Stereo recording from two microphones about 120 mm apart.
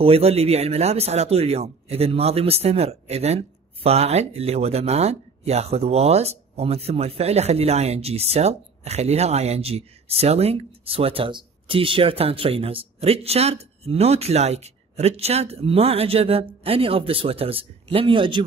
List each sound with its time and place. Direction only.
0.0 s speech: 55° right (ahead or behind)